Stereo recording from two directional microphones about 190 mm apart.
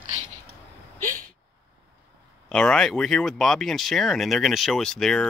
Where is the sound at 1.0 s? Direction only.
45° right (ahead or behind).